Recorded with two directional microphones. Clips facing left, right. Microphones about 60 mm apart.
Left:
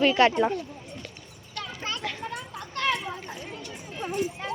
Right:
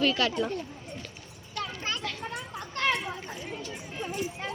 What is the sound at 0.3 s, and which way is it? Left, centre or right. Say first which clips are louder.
Speech: left 6 dB; left.